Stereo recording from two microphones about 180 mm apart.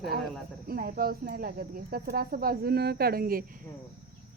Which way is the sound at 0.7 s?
55° right (ahead or behind).